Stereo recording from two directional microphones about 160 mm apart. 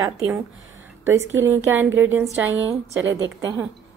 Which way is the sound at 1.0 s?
15° right (ahead or behind).